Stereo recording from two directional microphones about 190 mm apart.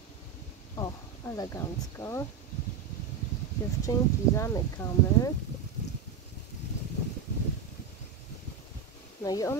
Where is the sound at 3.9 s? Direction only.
20° left (ahead or behind).